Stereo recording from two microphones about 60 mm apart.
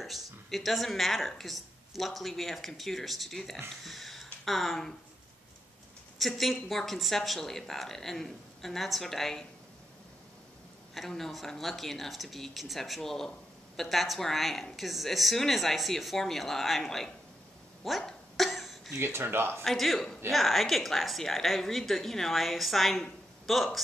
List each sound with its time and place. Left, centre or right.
0.0 s speech: centre
3.8 s a sound: centre
6.1 s speech: centre
11.0 s speech: centre
17.8 s a sound: centre
18.9 s speech: right
19.6 s speech: centre